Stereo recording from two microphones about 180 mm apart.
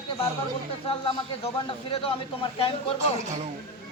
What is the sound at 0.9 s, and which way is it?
A man's voice, 30° left (ahead or behind).